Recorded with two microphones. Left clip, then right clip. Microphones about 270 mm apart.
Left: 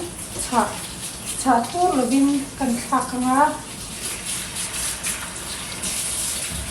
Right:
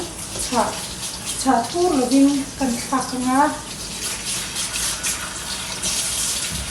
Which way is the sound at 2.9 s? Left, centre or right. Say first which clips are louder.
Left 2 dB; centre.